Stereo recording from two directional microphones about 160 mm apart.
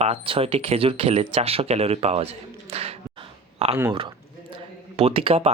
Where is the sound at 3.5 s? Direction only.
40° right (ahead or behind).